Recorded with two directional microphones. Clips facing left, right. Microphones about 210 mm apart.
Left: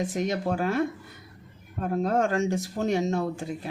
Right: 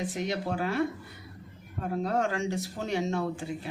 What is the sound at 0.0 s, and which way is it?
Speech, 45° left (ahead or behind).